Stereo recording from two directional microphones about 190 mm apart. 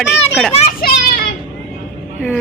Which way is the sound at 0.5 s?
35° left (ahead or behind).